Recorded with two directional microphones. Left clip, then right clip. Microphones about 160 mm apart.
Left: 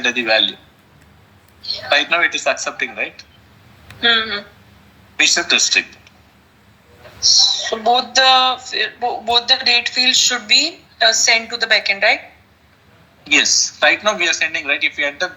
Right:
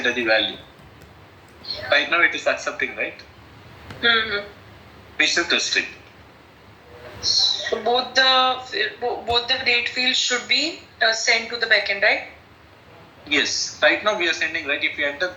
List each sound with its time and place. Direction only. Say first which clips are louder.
0.0 s a man's voice: left 4 dB; 45° left (ahead or behind)
1.6 s a man's voice: left 3 dB; 45° left (ahead or behind)
7.2 s a man's voice: left 7 dB; 45° left (ahead or behind)
13.2 s a man's voice: left 7 dB; 45° left (ahead or behind)